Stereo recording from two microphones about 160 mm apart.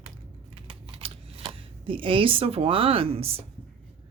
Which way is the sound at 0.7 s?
35° right (ahead or behind).